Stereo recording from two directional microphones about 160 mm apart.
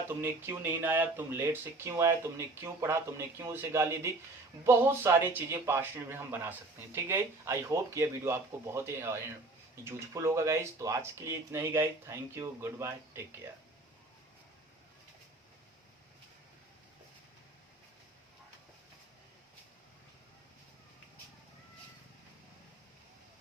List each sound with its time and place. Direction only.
0.2 s a man's voice: 15° right (ahead or behind)